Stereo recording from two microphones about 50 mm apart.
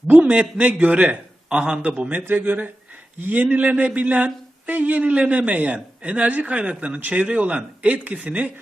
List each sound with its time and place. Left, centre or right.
0.2 s speech: right
2.0 s speech: right